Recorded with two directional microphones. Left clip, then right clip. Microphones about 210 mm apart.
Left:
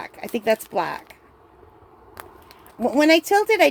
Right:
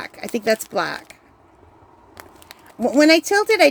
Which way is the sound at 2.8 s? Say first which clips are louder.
Right 2 dB; 15° right (ahead or behind).